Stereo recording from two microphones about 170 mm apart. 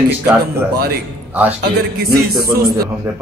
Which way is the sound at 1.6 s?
65° right (ahead or behind).